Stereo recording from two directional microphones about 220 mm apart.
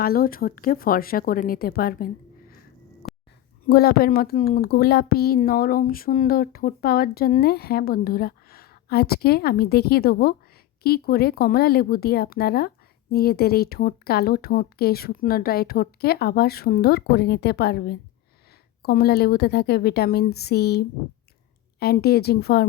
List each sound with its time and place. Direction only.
0.0 s a woman's voice: 40° left (ahead or behind)
3.0 s a sound: 40° left (ahead or behind)
3.7 s speech: 45° left (ahead or behind)